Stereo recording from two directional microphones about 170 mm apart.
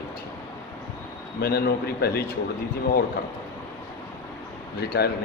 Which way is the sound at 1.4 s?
70° left (ahead or behind).